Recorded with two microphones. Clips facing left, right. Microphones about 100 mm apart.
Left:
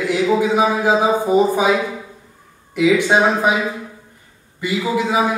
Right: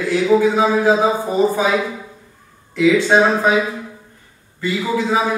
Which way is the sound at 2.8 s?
15° left (ahead or behind).